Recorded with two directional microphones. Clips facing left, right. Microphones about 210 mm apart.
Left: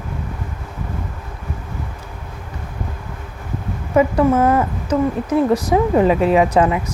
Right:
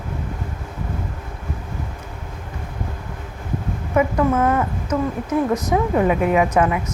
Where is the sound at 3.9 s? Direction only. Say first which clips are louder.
Left 4 dB; 30° left (ahead or behind).